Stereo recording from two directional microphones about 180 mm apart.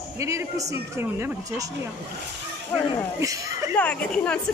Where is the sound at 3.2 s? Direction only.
20° right (ahead or behind).